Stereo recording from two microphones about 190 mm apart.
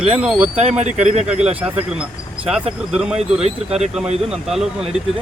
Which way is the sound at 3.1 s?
35° right (ahead or behind).